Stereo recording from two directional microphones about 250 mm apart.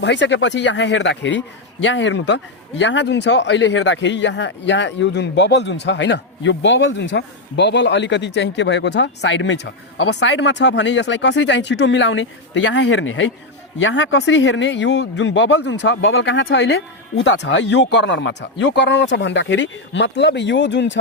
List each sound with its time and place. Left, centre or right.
0.0 s a man's voice: left